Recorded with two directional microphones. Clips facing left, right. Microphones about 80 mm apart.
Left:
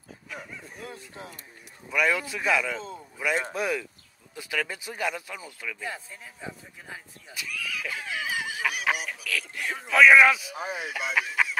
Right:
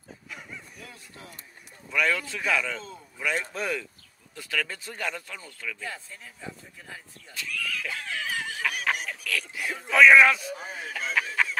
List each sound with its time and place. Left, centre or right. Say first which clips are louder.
0.7 s speech: left 6 dB; left
1.9 s a man's voice: left 1 dB; centre